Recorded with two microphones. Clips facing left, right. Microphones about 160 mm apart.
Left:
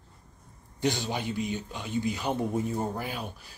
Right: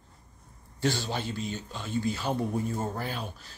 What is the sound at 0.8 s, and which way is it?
A man's voice, 15° left (ahead or behind).